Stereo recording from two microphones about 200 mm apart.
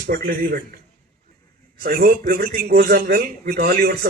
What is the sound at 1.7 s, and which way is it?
Speech, 50° right (ahead or behind).